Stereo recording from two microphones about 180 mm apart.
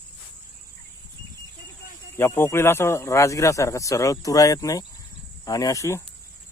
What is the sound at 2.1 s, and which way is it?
A man's voice, 15° left (ahead or behind).